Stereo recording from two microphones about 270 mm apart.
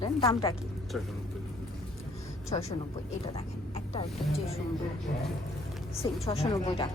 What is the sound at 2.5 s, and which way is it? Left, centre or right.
Speech, centre.